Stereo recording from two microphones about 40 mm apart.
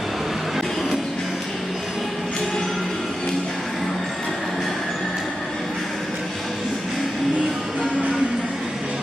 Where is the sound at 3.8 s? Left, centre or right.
Centre.